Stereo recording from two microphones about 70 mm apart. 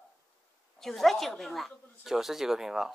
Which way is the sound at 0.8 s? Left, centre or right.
Centre.